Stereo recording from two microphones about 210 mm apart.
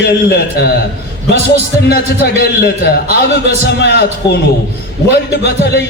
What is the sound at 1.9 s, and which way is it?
Music, 50° left (ahead or behind).